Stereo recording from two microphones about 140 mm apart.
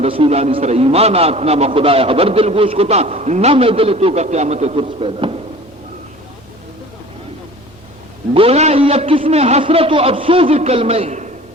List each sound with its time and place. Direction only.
0.0 s a man's voice: 45° right (ahead or behind)
8.3 s a man's voice: 45° right (ahead or behind)